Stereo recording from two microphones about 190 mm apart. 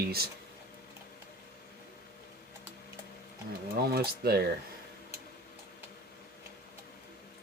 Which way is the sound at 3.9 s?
55° right (ahead or behind).